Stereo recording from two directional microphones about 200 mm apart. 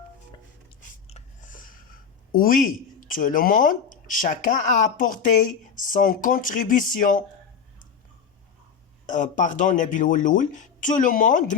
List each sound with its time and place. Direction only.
1.0 s speech: 35° left (ahead or behind)
9.0 s speech: 40° left (ahead or behind)